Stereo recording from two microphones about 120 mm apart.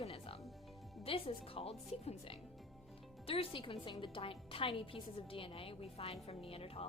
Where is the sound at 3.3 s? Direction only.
50° left (ahead or behind).